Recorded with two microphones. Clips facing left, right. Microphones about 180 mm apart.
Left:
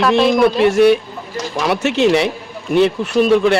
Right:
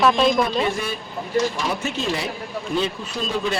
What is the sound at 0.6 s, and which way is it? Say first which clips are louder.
Speech: left 14 dB; 75° left (ahead or behind).